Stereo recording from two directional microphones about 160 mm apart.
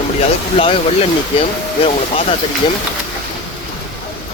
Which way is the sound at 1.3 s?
35° left (ahead or behind).